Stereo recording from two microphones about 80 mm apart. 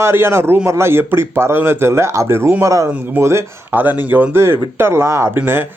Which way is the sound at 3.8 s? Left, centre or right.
Right.